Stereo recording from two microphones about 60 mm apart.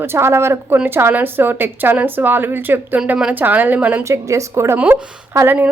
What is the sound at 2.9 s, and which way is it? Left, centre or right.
Speech, centre.